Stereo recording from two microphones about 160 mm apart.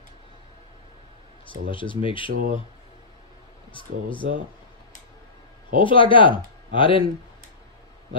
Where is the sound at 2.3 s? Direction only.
60° right (ahead or behind).